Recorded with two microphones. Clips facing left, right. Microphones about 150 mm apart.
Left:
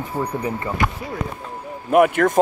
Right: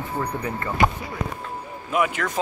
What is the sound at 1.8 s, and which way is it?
Speech, 55° left (ahead or behind).